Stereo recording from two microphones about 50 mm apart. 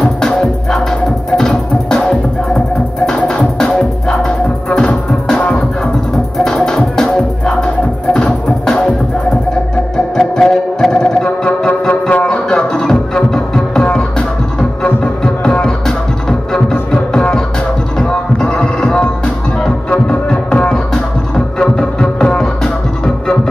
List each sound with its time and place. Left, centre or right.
0.0 s music: centre
3.3 s music: centre
4.8 s music: left
6.3 s music: centre
10.1 s music: centre
11.9 s music: left
16.3 s music: centre